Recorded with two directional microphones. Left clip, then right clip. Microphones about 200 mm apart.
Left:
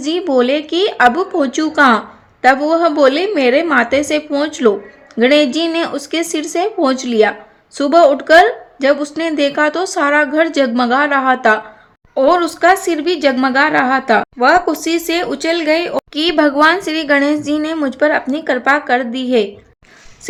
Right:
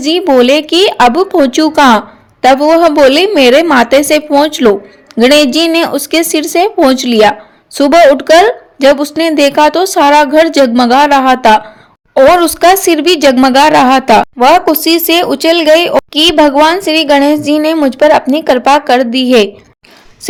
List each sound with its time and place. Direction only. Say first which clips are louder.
0.0 s a woman's voice: right 7 dB; 30° right (ahead or behind)